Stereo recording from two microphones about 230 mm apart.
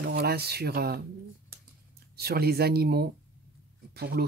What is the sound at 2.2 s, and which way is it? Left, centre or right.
Speech, right.